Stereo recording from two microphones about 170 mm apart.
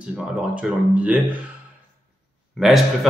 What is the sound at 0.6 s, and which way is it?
Speech, 10° right (ahead or behind).